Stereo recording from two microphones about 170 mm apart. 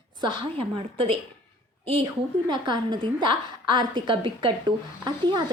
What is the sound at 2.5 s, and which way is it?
Speech, 25° right (ahead or behind).